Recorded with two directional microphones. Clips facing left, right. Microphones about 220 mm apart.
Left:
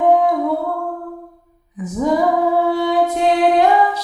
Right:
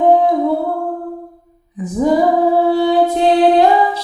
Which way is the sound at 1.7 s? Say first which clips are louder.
Right 4 dB; 30° right (ahead or behind).